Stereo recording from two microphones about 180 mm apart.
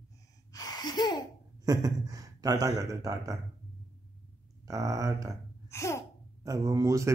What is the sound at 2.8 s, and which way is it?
Speech, 20° right (ahead or behind).